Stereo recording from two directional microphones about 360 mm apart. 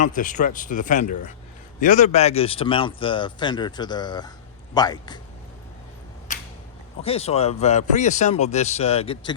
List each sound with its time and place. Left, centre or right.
0.0 s speech: left
6.3 s a sound: centre
7.0 s speech: centre